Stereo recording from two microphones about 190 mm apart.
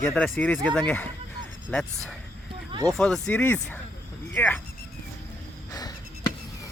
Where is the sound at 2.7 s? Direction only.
20° right (ahead or behind).